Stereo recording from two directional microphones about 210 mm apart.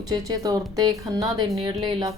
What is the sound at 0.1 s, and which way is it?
Speech, 15° right (ahead or behind).